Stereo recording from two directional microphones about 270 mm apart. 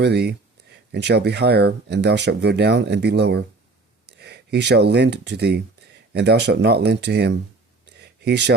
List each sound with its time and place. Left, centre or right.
0.0 s speech: right